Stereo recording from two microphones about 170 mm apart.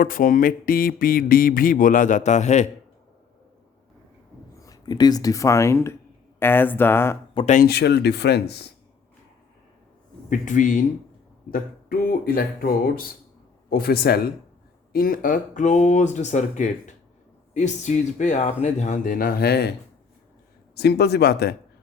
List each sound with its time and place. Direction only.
0.0 s speech: 55° left (ahead or behind)
4.6 s speech: 20° left (ahead or behind)
7.3 s speech: 40° left (ahead or behind)
7.6 s speech: 75° left (ahead or behind)
10.2 s speech: 50° left (ahead or behind); by 19.7 s 70° left (ahead or behind)
20.7 s speech: 75° left (ahead or behind)